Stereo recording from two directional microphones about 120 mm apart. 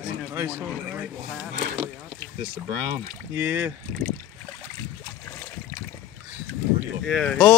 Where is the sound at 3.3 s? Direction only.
15° right (ahead or behind).